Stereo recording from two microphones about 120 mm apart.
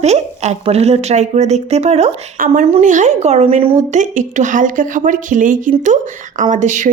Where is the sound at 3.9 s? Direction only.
90° right.